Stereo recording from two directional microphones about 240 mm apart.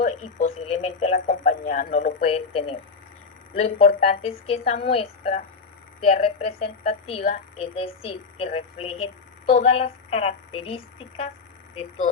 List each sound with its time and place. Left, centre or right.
0.0 s speech: left